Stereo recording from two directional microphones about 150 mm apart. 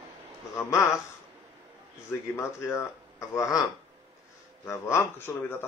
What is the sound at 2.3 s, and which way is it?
A man's voice, 15° left (ahead or behind).